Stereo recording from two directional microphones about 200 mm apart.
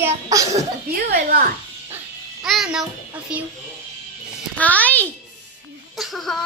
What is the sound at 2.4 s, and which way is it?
Music, centre (ahead or behind).